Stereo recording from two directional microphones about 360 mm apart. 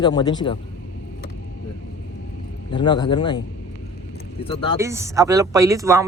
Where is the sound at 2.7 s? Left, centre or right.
Centre.